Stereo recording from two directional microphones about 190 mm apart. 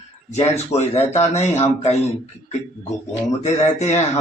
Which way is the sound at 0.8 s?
35° left (ahead or behind).